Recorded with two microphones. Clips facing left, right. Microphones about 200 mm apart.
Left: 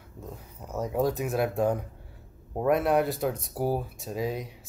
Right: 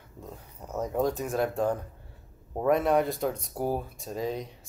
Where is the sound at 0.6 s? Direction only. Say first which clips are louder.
Left 1 dB; centre (ahead or behind).